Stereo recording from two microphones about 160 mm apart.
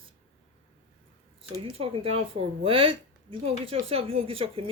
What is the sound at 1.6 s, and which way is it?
Speech, 35° right (ahead or behind).